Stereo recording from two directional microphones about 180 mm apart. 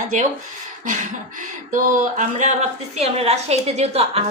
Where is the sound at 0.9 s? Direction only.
45° right (ahead or behind).